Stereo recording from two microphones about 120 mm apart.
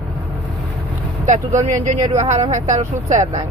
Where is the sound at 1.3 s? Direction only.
85° right.